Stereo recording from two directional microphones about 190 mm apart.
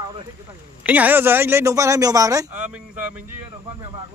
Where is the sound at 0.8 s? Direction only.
10° right (ahead or behind).